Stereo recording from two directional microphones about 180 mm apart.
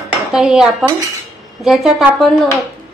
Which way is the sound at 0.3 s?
5° right (ahead or behind).